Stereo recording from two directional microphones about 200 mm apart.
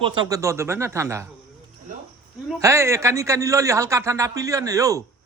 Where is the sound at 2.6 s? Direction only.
15° right (ahead or behind).